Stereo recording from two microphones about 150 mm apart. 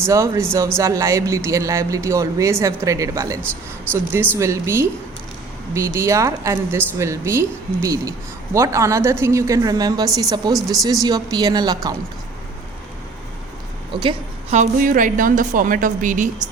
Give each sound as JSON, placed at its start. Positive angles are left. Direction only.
{"t": 0.0, "sound": "speech", "side_deg": -20}
{"t": 10.5, "sound": "speech", "side_deg": 0}
{"t": 11.0, "sound": "speech", "side_deg": -25}
{"t": 13.9, "sound": "a woman's voice", "side_deg": -35}
{"t": 14.5, "sound": "a woman's voice", "side_deg": -60}